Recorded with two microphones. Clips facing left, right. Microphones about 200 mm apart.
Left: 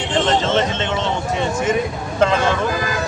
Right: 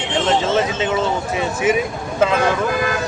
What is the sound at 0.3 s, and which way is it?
Speech, 5° right (ahead or behind).